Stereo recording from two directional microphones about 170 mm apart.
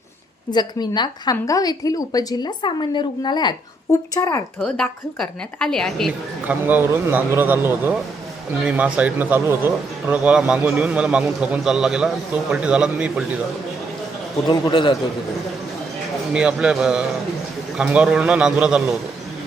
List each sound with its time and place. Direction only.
0.5 s a woman's voice: 25° left (ahead or behind)
4.6 s a woman's voice: 5° left (ahead or behind)
6.7 s a man's voice: 10° right (ahead or behind)
14.4 s a woman's voice: 30° left (ahead or behind)
16.3 s a woman's voice: 5° right (ahead or behind)